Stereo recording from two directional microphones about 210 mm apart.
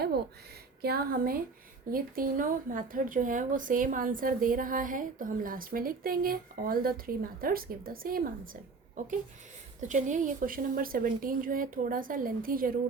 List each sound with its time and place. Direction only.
0.8 s speech: 45° right (ahead or behind)
9.8 s speech: 35° right (ahead or behind)